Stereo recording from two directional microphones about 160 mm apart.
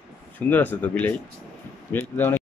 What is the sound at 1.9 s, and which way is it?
Speech, 15° left (ahead or behind).